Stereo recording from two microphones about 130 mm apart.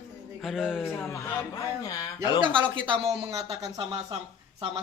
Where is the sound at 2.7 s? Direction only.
40° right (ahead or behind).